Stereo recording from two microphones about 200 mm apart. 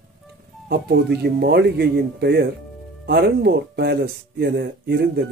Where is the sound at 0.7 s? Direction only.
55° right (ahead or behind).